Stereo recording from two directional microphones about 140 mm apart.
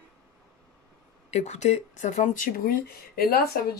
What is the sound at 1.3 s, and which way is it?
Speech, 55° left (ahead or behind).